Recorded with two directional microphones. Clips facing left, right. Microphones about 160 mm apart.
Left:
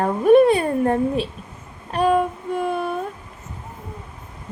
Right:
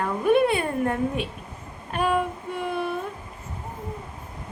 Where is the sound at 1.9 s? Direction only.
35° left (ahead or behind).